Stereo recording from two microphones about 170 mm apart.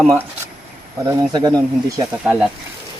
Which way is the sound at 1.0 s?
20° right (ahead or behind).